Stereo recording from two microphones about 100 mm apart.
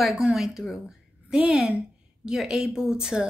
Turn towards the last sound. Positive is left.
turn(degrees=-5)  # may be behind; listen again after turning